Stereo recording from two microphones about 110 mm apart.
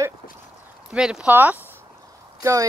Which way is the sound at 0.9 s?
5° right (ahead or behind).